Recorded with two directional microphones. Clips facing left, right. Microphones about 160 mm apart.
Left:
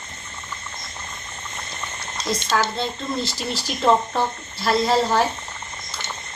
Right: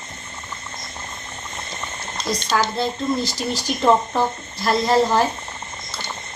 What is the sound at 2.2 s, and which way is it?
Speech, 5° right (ahead or behind).